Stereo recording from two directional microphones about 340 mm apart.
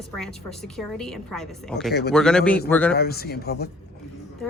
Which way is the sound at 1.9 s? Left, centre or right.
Left.